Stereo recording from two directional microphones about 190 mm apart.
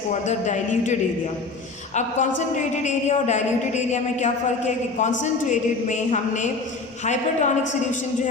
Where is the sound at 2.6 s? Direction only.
40° left (ahead or behind).